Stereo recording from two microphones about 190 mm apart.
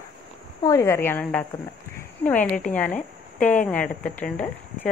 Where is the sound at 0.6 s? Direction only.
15° left (ahead or behind).